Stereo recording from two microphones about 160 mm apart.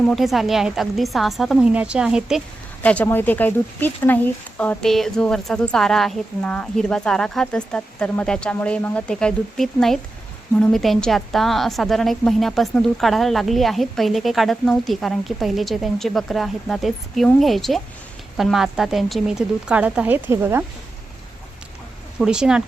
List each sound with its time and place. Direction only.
0.0 s a woman's voice: centre (ahead or behind)
2.8 s a woman's voice: 10° left (ahead or behind); by 20.7 s 15° right (ahead or behind)
22.2 s a woman's voice: 5° right (ahead or behind)